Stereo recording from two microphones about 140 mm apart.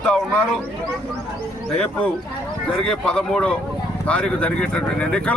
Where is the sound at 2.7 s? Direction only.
5° left (ahead or behind).